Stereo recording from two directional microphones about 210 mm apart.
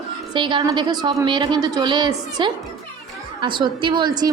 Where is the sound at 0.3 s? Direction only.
25° right (ahead or behind).